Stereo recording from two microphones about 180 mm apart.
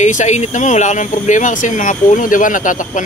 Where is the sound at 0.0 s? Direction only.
40° left (ahead or behind).